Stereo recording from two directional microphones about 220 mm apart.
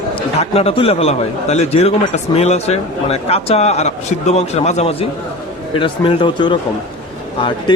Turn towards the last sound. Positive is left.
turn(degrees=20)  # may be behind; listen again after turning